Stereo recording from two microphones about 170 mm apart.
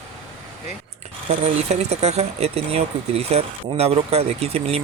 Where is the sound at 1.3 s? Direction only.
40° right (ahead or behind).